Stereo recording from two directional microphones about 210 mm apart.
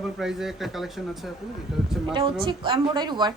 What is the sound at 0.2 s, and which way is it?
Speech, centre (ahead or behind).